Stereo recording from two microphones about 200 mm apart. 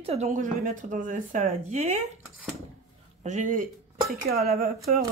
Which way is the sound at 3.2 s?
35° right (ahead or behind).